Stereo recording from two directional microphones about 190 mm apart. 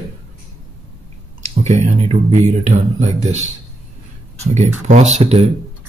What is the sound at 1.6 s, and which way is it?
Speech, 35° right (ahead or behind).